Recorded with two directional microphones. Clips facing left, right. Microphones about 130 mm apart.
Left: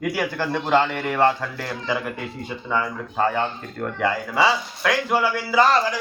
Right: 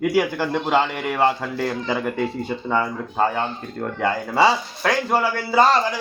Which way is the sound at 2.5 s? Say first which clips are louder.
Right 5 dB; 40° right (ahead or behind).